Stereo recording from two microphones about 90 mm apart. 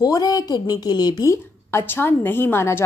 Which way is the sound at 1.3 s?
30° left (ahead or behind).